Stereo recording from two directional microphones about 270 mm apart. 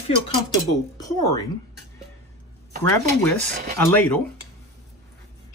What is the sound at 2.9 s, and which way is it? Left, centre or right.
Speech, centre.